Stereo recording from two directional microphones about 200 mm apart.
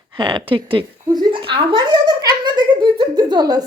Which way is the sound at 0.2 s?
25° right (ahead or behind).